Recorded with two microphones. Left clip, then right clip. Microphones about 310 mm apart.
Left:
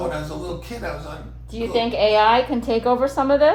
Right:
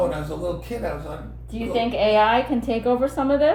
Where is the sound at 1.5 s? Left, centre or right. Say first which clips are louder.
Left 2 dB; left.